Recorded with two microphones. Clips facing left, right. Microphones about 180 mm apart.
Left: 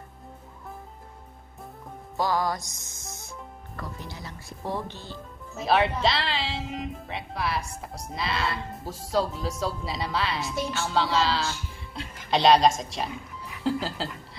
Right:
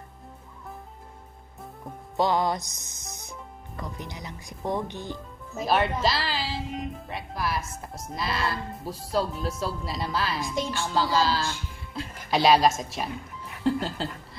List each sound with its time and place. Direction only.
2.1 s music: 20° right (ahead or behind)
5.6 s speech: centre (ahead or behind)
11.5 s music: 5° right (ahead or behind)
12.3 s a woman's voice: 5° right (ahead or behind)